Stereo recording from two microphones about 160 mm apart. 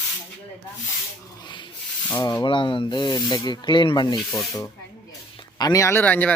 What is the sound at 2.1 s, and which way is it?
Speech, 20° left (ahead or behind).